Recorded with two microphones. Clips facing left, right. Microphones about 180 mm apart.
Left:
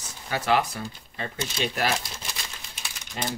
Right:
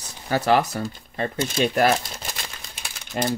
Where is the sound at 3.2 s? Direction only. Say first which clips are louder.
Right 7 dB; 55° right (ahead or behind).